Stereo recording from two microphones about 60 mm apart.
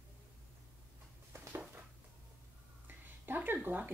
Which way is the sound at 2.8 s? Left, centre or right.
Right.